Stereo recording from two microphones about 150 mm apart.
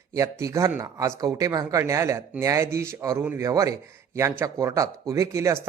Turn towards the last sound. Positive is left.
turn(degrees=-20)  # may be behind; listen again after turning